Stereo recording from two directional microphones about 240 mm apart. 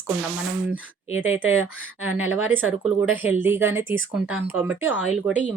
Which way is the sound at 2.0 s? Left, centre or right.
Centre.